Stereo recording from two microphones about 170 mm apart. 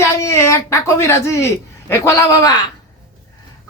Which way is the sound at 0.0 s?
15° left (ahead or behind).